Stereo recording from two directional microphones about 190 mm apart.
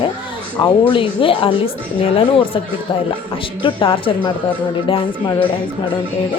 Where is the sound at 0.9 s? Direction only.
25° left (ahead or behind).